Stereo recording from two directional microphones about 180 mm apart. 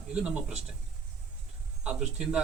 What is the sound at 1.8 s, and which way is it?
Speech, 5° right (ahead or behind).